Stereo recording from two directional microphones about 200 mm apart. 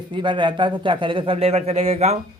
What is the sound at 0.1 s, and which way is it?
Speech, 25° right (ahead or behind).